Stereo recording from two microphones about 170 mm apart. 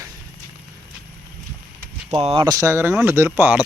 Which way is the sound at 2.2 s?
35° right (ahead or behind).